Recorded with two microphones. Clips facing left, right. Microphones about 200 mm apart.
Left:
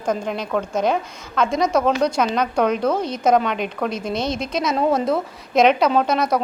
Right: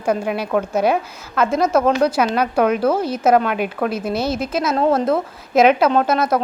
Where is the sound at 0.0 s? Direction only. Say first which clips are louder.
Right 3 dB; 10° right (ahead or behind).